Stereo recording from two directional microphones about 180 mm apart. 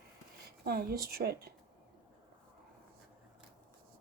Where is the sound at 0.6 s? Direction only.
60° right (ahead or behind).